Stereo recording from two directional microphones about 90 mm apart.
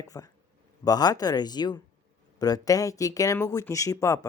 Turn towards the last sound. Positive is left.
turn(degrees=35)  # may be behind; listen again after turning